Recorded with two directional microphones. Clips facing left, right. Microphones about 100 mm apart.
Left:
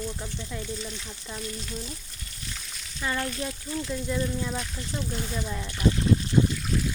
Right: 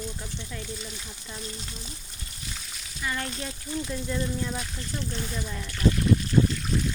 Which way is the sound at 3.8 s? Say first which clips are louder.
Left 3 dB; centre (ahead or behind).